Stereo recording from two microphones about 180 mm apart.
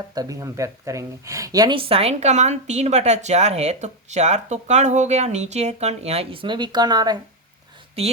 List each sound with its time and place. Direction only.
0.1 s speech: 20° right (ahead or behind)